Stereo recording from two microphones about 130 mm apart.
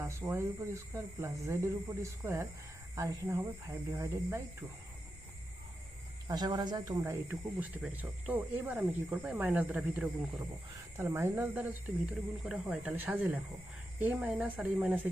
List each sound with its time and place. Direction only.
0.0 s speech: 20° right (ahead or behind)
6.2 s speech: 30° right (ahead or behind)
7.3 s speech: 10° right (ahead or behind)